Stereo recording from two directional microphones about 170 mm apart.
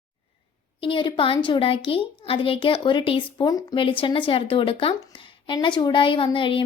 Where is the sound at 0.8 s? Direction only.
30° left (ahead or behind).